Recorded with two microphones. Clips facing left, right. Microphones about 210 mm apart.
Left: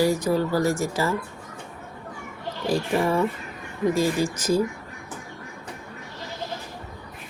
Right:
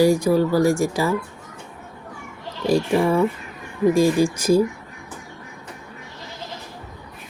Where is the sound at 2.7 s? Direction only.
15° right (ahead or behind).